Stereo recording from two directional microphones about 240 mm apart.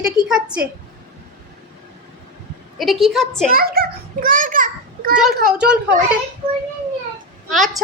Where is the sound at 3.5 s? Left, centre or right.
Right.